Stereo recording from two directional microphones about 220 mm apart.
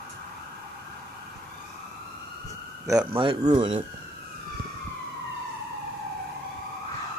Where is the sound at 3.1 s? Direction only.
25° right (ahead or behind).